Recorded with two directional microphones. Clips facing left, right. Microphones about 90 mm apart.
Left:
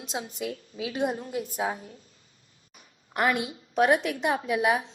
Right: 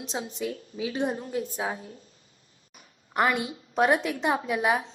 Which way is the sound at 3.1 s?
Centre (ahead or behind).